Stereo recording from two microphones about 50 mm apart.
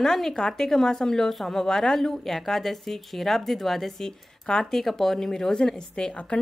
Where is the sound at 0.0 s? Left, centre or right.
Centre.